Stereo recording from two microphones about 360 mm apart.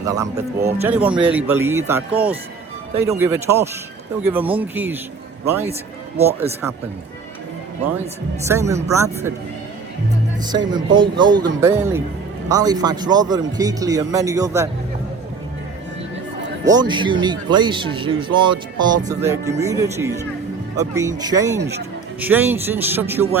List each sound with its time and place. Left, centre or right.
0.0 s speech: centre
8.4 s speech: centre
10.7 s speech: centre
16.6 s speech: centre
21.6 s speech: right
22.2 s speech: centre